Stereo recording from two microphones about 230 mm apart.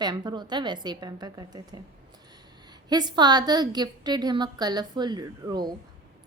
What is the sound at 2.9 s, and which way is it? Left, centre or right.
A woman's voice, centre.